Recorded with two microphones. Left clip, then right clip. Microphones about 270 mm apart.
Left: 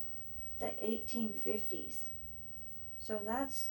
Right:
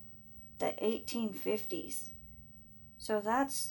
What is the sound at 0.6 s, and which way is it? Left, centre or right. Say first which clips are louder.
Speech: right 5 dB; right.